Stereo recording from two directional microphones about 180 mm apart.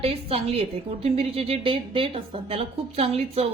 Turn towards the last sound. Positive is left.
turn(degrees=-35)  # may be behind; listen again after turning